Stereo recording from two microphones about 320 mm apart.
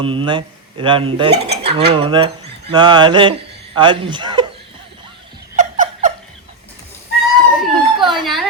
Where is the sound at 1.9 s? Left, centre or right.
Centre.